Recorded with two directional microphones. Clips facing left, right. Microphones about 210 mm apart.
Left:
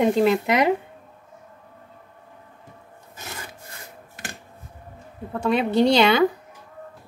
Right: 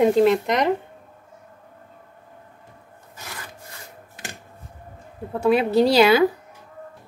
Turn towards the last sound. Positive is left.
turn(degrees=-5)  # may be behind; listen again after turning